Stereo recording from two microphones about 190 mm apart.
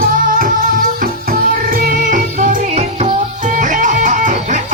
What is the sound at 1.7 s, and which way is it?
Music, 45° right (ahead or behind).